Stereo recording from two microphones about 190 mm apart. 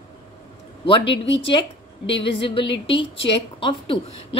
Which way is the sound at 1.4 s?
25° left (ahead or behind).